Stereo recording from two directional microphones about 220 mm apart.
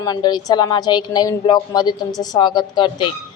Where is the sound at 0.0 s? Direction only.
20° left (ahead or behind).